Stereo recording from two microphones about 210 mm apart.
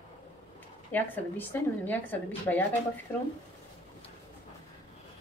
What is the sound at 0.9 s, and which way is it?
A woman's voice, 10° left (ahead or behind).